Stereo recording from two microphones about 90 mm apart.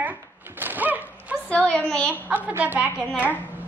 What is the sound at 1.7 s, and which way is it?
Speech, 10° left (ahead or behind).